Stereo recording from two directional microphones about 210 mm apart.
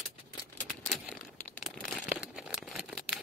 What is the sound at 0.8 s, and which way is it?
Crumpling, 5° left (ahead or behind).